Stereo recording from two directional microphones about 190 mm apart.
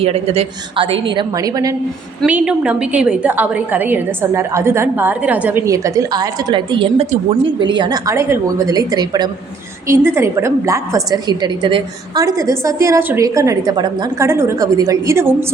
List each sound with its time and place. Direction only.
0.0 s a woman's voice: 30° right (ahead or behind)
2.2 s a woman's voice: 5° right (ahead or behind)